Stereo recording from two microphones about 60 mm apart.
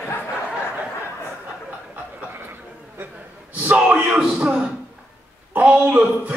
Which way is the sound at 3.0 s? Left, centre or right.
Right.